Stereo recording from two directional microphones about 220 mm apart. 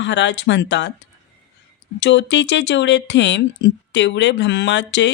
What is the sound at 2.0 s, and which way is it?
Speech, 55° left (ahead or behind).